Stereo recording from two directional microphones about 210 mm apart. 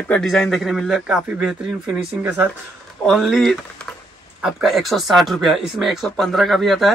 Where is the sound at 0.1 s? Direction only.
Centre (ahead or behind).